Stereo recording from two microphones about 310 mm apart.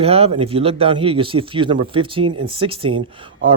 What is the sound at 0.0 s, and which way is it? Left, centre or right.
Speech, centre.